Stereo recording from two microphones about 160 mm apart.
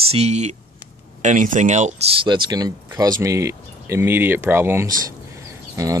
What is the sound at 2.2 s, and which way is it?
Speech, 30° right (ahead or behind).